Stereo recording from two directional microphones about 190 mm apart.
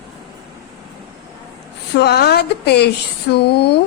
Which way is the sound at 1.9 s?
60° left (ahead or behind).